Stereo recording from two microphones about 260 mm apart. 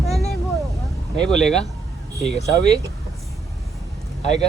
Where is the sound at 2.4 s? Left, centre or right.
Left.